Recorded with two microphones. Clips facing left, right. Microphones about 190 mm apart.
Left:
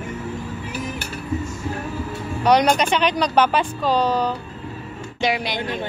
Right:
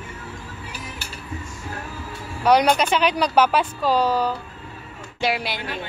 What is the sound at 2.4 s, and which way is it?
Speech, 5° right (ahead or behind).